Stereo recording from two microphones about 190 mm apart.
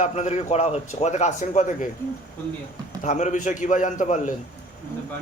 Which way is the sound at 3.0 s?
40° left (ahead or behind).